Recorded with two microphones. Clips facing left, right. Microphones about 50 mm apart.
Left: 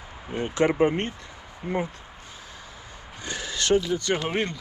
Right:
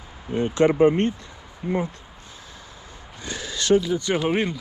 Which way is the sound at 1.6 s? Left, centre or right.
Centre.